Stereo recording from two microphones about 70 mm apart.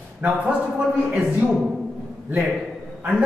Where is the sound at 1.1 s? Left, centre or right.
Centre.